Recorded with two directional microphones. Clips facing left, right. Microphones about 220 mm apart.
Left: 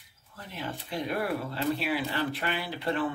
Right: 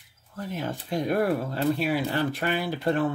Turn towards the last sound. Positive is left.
turn(degrees=-45)  # may be behind; listen again after turning